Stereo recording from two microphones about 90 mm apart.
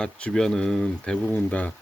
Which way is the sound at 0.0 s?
10° left (ahead or behind).